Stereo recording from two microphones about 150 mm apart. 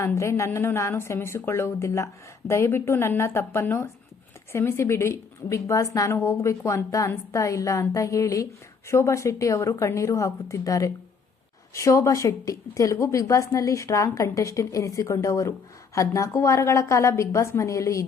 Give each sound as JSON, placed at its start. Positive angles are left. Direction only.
{"t": 0.0, "sound": "a woman's voice", "side_deg": 20}